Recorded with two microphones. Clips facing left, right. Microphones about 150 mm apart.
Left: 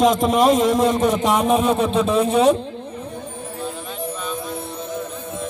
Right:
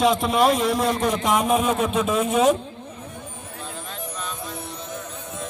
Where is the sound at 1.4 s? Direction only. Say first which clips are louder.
Left 3 dB; 35° left (ahead or behind).